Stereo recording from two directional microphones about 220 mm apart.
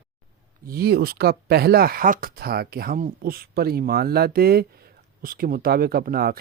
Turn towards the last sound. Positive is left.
turn(degrees=-45)  # may be behind; listen again after turning